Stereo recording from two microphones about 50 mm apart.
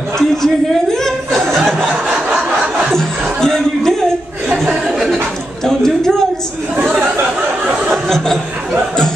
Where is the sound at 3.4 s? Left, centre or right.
Centre.